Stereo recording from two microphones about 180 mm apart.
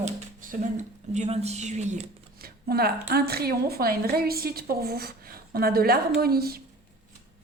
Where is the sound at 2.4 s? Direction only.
60° right (ahead or behind).